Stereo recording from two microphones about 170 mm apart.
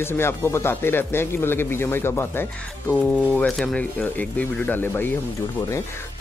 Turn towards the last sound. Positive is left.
turn(degrees=10)  # may be behind; listen again after turning